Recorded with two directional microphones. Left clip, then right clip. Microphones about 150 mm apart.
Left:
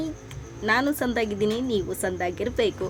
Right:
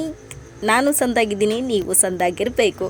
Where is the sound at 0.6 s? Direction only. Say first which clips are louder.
Right 6 dB; 30° right (ahead or behind).